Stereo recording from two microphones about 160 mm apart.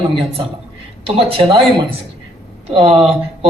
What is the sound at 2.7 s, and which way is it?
Speech, 40° right (ahead or behind).